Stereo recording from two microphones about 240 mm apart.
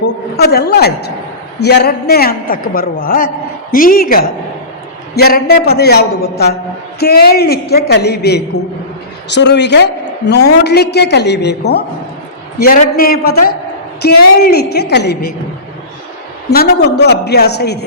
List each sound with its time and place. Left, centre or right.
0.0 s a woman's voice: left
17.0 s a woman's voice: left